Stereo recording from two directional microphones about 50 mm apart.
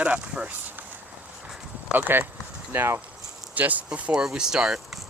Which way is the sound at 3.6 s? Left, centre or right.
Right.